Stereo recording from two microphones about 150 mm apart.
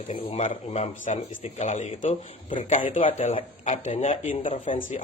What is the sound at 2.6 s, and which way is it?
Speech, 60° left (ahead or behind).